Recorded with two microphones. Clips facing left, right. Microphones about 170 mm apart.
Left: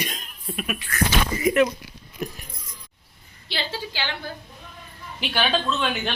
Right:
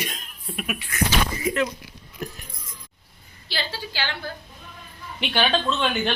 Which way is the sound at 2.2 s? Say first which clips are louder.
Left 2 dB; 15° left (ahead or behind).